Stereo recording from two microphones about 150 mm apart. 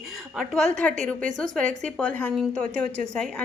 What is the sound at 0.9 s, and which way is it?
Speech, 55° right (ahead or behind).